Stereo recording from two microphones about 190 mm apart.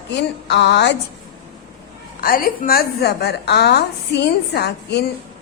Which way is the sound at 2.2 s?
50° left (ahead or behind).